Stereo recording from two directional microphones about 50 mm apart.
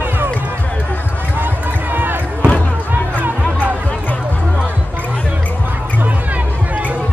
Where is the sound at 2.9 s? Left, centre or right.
Right.